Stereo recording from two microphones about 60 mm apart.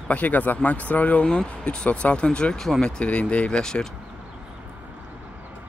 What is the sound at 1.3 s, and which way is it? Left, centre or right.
Speech, centre.